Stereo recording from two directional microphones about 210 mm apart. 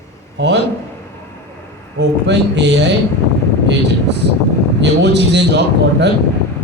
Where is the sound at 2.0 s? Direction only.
55° right (ahead or behind).